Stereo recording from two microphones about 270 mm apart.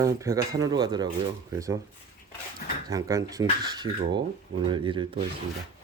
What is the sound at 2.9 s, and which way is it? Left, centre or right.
Speech, centre.